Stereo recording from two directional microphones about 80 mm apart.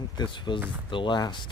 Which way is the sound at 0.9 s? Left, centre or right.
Left.